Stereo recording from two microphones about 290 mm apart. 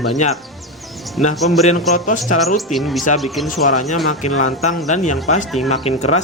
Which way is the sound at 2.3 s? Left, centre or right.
Centre.